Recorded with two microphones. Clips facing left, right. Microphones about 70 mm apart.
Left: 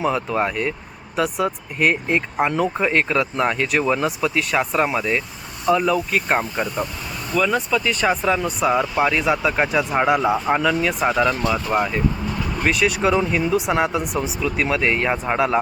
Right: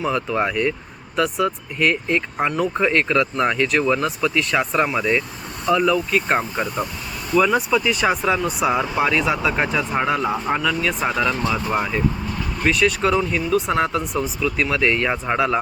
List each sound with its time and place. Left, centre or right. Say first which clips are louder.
0.0 s speech: left 1 dB; centre
0.3 s speech: right 1 dB; centre
7.3 s speech: right 3 dB; centre
11.3 s speech: left 1 dB; left
11.7 s speech: left 1 dB; centre